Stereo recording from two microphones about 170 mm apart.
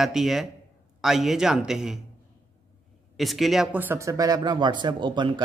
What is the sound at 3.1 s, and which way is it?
A man's voice, centre (ahead or behind).